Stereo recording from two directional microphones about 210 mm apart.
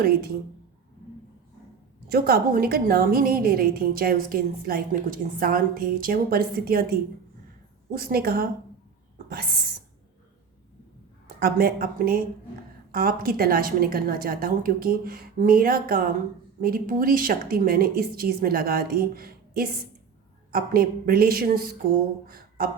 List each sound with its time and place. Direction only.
2.0 s a woman's voice: 45° right (ahead or behind)
7.9 s a woman's voice: 45° right (ahead or behind)
9.1 s whispering: 45° right (ahead or behind)
11.3 s a woman's voice: 45° right (ahead or behind)
22.3 s a sound: 45° right (ahead or behind)